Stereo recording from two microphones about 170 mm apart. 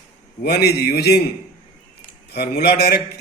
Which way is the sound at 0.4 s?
70° left (ahead or behind).